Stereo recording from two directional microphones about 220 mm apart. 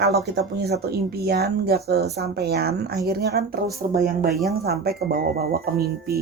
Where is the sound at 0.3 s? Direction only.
50° right (ahead or behind).